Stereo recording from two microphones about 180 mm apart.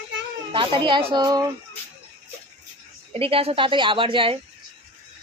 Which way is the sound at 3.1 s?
30° right (ahead or behind).